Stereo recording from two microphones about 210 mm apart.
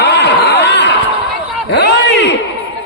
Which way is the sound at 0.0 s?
55° left (ahead or behind).